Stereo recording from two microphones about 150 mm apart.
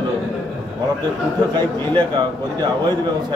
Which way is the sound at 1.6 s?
30° right (ahead or behind).